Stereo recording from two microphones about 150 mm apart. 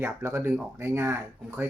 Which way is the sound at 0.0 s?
15° right (ahead or behind).